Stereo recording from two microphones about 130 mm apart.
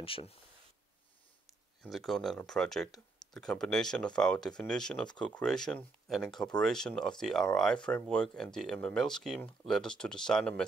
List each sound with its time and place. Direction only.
0.0 s speech: 45° left (ahead or behind)
1.8 s speech: centre (ahead or behind)